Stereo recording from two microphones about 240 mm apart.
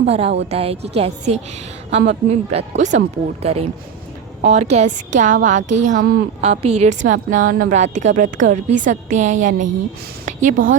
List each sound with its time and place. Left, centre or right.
0.0 s a woman's voice: right